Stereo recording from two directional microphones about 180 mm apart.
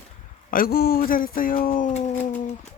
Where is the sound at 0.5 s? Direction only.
55° left (ahead or behind).